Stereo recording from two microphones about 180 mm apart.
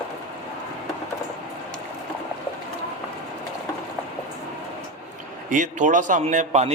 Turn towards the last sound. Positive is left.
turn(degrees=-40)  # may be behind; listen again after turning